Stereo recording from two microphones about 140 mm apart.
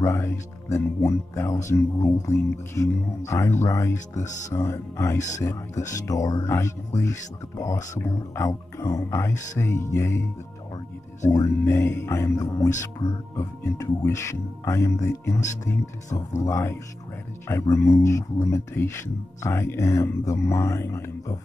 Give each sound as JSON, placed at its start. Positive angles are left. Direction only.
{"t": 0.0, "sound": "speech", "side_deg": 20}
{"t": 11.2, "sound": "speech", "side_deg": 20}